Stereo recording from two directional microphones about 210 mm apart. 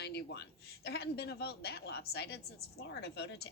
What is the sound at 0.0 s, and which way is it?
A woman's voice, 50° left (ahead or behind).